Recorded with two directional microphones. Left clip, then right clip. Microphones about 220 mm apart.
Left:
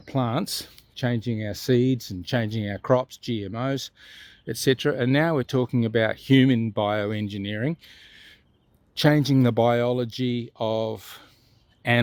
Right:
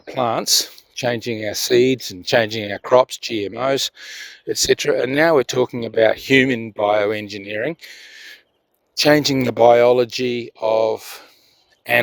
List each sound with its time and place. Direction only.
0.0 s speech: 35° right (ahead or behind)
7.8 s a sound: 30° right (ahead or behind)
9.0 s speech: 35° right (ahead or behind)